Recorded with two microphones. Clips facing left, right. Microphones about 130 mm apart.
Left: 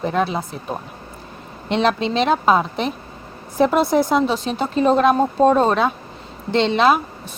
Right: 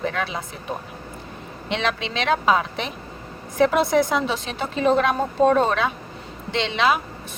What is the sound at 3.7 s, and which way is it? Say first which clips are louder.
Speech: left 4 dB; 40° left (ahead or behind).